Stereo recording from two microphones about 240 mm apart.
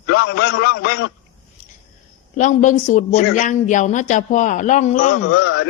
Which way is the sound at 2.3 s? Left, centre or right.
Left.